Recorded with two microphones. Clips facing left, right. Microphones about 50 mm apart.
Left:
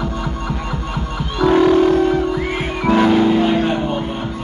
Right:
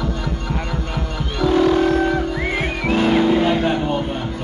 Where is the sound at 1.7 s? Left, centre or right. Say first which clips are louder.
Left 3 dB; centre.